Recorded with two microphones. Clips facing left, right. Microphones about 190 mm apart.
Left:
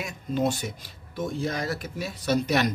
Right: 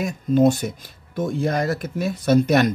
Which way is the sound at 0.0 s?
45° right (ahead or behind).